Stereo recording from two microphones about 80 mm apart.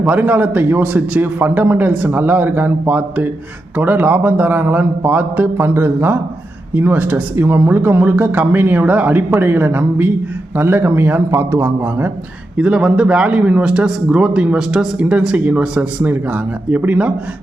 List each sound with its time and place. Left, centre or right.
0.0 s speech: centre
12.5 s speech: centre